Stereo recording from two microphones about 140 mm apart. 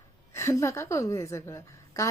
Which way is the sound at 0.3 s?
20° left (ahead or behind).